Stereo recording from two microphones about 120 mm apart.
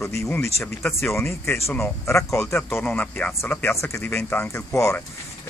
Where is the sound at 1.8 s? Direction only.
25° left (ahead or behind).